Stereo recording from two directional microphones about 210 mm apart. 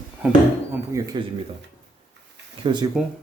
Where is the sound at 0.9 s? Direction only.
15° right (ahead or behind).